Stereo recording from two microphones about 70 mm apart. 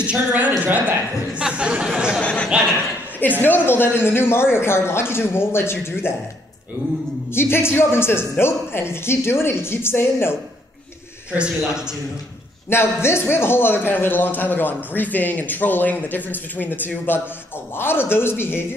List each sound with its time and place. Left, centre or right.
0.0 s a woman's voice: centre
1.4 s a sound: centre
2.2 s a sound: centre
3.2 s speech: left
7.3 s speech: left
11.3 s a man's voice: centre
12.6 s a man's voice: left